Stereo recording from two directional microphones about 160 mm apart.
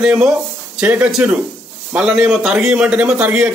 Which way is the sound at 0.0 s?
5° right (ahead or behind).